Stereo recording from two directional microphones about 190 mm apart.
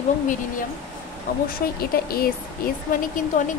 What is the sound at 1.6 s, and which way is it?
Speech, 50° left (ahead or behind).